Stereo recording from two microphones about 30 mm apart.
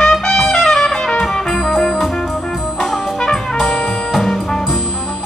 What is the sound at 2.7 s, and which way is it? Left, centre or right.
Brass instrument, centre.